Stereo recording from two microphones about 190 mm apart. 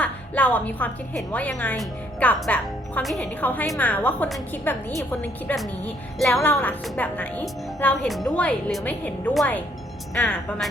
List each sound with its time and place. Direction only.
0.0 s a woman's voice: 10° left (ahead or behind)